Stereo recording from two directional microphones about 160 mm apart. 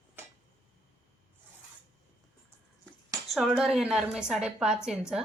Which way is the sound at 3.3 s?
Centre (ahead or behind).